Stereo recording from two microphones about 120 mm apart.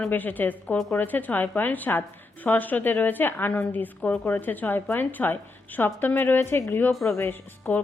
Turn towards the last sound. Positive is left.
turn(degrees=15)  # may be behind; listen again after turning